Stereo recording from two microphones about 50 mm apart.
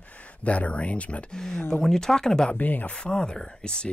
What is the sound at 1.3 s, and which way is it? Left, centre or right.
Speech, centre.